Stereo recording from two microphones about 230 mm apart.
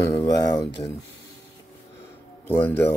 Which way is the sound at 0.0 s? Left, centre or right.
Centre.